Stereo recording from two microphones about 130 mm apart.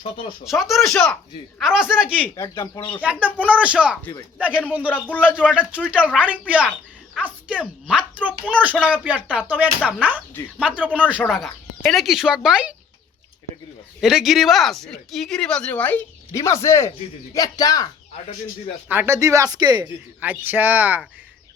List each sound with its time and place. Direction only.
0.4 s speech: centre (ahead or behind)
3.0 s speech: 10° right (ahead or behind)
4.9 s a man's voice: 10° left (ahead or behind)
5.4 s speech: 10° right (ahead or behind)
14.0 s speech: centre (ahead or behind)
16.3 s speech: 25° left (ahead or behind)
18.9 s speech: 15° right (ahead or behind)
20.2 s speech: 15° right (ahead or behind)